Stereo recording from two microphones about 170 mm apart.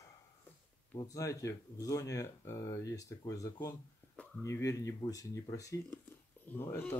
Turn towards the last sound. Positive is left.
turn(degrees=15)  # may be behind; listen again after turning